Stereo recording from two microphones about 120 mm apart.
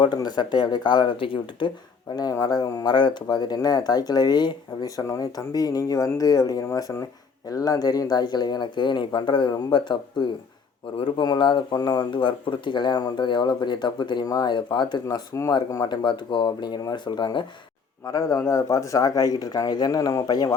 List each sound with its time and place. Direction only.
0.0 s speech: 35° left (ahead or behind)
2.1 s speech: 30° left (ahead or behind)
18.0 s speech: 30° left (ahead or behind)